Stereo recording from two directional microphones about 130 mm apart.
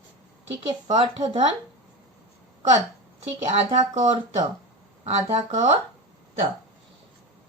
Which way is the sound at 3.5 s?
65° right (ahead or behind).